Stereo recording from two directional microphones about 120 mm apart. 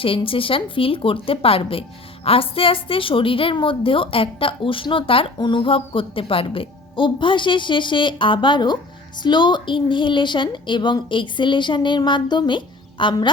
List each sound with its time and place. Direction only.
0.0 s a woman's voice: 50° left (ahead or behind)